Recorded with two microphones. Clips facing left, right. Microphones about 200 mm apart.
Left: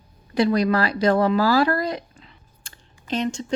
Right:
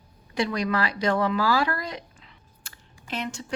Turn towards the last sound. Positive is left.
turn(degrees=30)  # may be behind; listen again after turning